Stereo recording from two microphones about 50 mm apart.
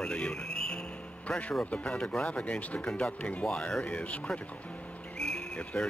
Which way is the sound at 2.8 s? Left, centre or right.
Centre.